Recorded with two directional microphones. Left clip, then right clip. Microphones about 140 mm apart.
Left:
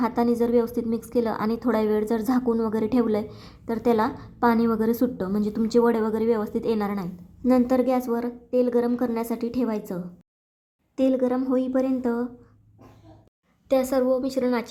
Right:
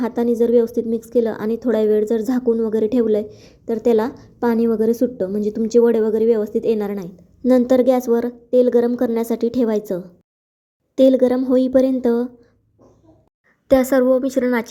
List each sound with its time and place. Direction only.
0.0 s a woman's voice: 15° right (ahead or behind)
13.7 s a woman's voice: 25° right (ahead or behind)